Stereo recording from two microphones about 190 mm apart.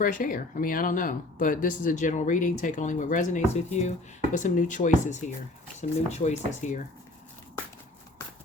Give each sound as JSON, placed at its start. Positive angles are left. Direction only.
{"t": 0.0, "sound": "speech", "side_deg": 45}